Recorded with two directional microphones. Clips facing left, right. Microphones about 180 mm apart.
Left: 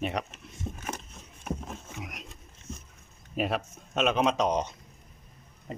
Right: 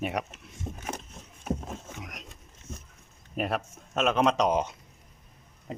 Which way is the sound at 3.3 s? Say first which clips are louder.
Left 1 dB; centre (ahead or behind).